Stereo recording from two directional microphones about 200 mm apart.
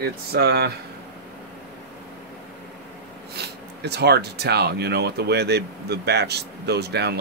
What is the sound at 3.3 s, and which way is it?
Speech, 55° right (ahead or behind).